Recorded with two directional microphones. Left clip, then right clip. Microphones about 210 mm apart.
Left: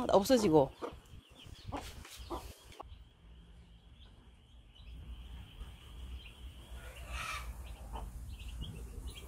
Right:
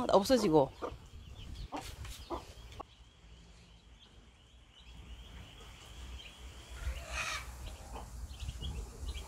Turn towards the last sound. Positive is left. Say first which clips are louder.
# right 4 dB
turn(degrees=-40)  # may be behind; listen again after turning